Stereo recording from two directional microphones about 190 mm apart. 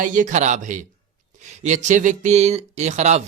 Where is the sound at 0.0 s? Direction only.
45° right (ahead or behind).